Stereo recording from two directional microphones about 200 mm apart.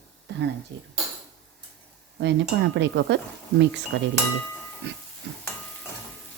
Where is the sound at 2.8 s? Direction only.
60° right (ahead or behind).